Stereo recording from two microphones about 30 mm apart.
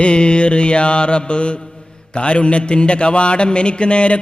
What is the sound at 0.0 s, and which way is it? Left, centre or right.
Mantra, left.